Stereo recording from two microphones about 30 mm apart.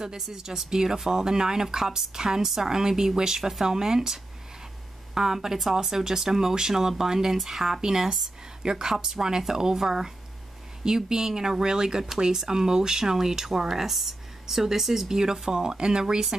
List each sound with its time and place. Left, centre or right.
0.0 s speech: centre
8.6 s speech: right